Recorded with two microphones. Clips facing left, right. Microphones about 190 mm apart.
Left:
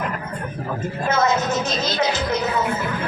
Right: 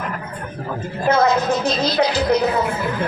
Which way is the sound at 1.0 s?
35° right (ahead or behind).